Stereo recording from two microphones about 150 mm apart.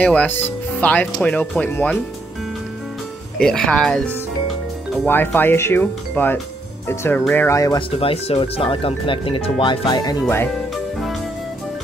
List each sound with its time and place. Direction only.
0.0 s speech: 10° left (ahead or behind)
3.3 s speech: 5° left (ahead or behind); by 7.8 s 20° left (ahead or behind)
7.9 s speech: 40° left (ahead or behind)
10.7 s music: centre (ahead or behind)